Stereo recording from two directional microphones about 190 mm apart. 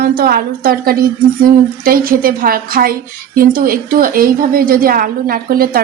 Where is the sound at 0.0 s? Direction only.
55° right (ahead or behind).